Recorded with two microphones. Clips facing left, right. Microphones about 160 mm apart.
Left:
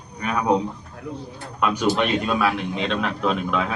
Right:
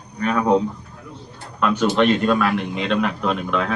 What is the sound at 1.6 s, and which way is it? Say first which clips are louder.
A man's voice: right 3 dB; 5° left (ahead or behind).